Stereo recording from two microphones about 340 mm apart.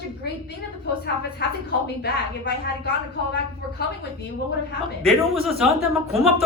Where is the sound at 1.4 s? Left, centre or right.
Left.